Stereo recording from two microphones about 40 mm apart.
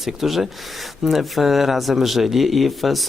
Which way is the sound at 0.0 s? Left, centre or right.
Centre.